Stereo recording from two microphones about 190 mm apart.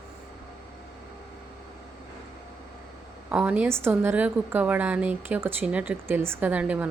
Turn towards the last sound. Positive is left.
turn(degrees=-5)  # may be behind; listen again after turning